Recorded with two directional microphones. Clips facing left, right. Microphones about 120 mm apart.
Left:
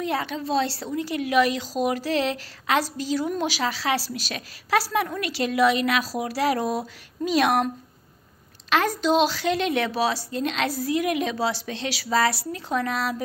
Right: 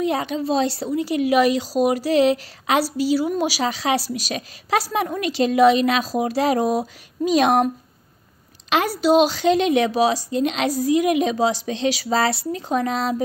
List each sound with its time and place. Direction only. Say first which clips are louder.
0.0 s a woman's voice: right 5 dB; 15° right (ahead or behind)